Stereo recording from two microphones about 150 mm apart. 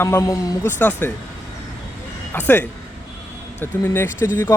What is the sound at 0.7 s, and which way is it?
Speech, 10° left (ahead or behind).